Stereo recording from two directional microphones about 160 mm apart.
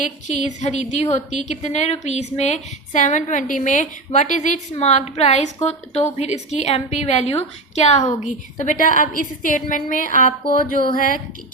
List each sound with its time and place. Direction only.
0.3 s a woman's voice: 45° left (ahead or behind)